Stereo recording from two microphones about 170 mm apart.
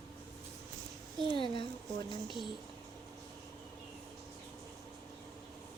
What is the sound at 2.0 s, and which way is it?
Speech, 25° left (ahead or behind).